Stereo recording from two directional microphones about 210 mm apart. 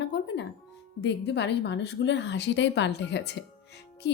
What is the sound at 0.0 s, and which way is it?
Music, 55° left (ahead or behind).